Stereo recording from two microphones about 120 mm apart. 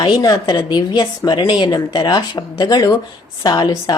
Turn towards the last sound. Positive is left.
turn(degrees=35)  # may be behind; listen again after turning